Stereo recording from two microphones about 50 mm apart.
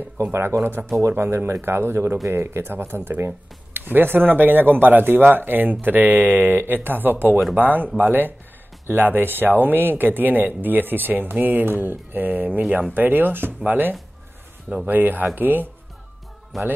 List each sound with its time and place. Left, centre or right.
0.2 s speech: right
16.5 s speech: centre